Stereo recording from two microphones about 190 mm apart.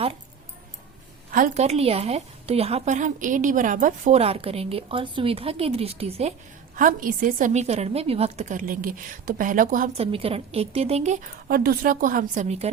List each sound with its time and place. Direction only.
1.3 s a woman's voice: 40° right (ahead or behind)
6.7 s a woman's voice: 45° right (ahead or behind)
10.1 s a woman's voice: 30° right (ahead or behind)